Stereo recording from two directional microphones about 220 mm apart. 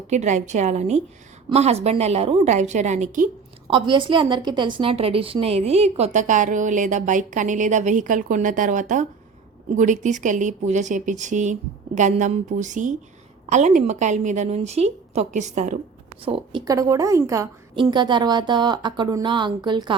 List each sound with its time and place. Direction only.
0.1 s a woman's voice: 35° right (ahead or behind)
3.7 s a woman's voice: 20° right (ahead or behind)
16.2 s a woman's voice: 20° right (ahead or behind)